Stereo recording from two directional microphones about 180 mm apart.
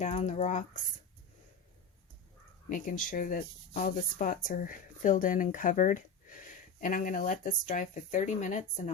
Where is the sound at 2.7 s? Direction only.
50° left (ahead or behind).